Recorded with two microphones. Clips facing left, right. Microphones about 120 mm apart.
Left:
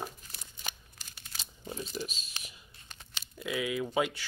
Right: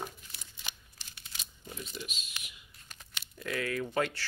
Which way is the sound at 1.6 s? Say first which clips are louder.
Left 5 dB; 35° left (ahead or behind).